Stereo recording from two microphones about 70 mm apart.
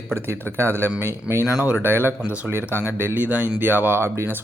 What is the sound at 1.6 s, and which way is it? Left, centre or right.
Speech, right.